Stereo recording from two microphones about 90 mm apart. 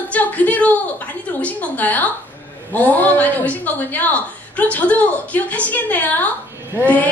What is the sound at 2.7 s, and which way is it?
A woman's voice, 20° left (ahead or behind).